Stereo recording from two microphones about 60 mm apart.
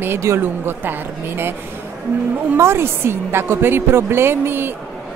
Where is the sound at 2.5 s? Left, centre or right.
Right.